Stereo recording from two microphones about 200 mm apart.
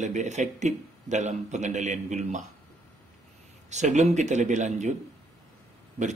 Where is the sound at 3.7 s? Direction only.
35° right (ahead or behind).